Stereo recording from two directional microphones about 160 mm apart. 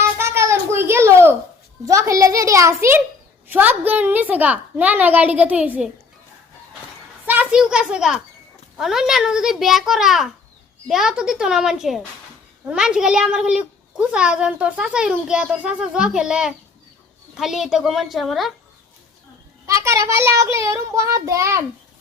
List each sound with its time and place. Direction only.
0.2 s a sound: 15° right (ahead or behind)
1.8 s a child's voice: 20° right (ahead or behind)
7.3 s a child's voice: 10° right (ahead or behind)
19.6 s a child's voice: 20° right (ahead or behind)